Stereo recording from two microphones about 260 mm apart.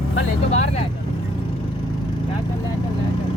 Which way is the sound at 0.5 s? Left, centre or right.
Left.